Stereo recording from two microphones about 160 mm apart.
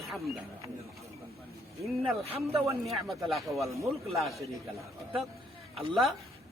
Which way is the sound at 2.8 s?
Centre (ahead or behind).